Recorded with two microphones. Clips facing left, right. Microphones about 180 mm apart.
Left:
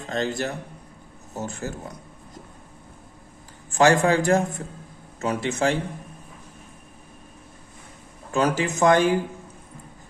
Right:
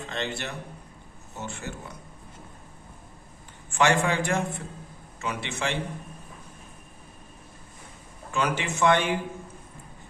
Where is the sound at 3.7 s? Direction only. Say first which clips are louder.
Left 5 dB; 35° left (ahead or behind).